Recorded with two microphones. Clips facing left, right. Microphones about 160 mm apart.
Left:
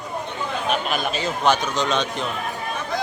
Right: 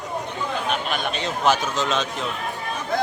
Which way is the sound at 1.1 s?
Centre (ahead or behind).